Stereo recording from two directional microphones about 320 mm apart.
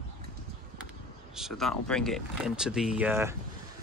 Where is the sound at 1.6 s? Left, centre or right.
Centre.